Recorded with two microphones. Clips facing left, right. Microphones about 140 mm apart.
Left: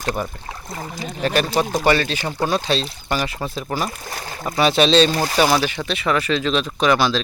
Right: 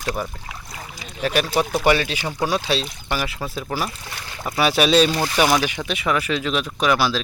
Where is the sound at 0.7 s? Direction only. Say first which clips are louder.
Left 12 dB; 40° left (ahead or behind).